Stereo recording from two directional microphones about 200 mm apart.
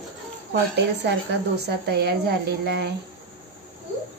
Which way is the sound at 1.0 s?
55° right (ahead or behind).